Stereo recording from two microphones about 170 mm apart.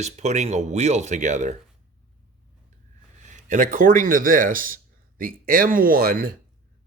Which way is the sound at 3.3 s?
45° right (ahead or behind).